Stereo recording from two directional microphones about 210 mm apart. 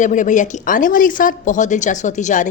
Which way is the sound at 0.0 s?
35° left (ahead or behind).